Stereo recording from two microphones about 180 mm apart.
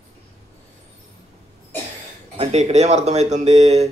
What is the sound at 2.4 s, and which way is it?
Speech, 40° right (ahead or behind).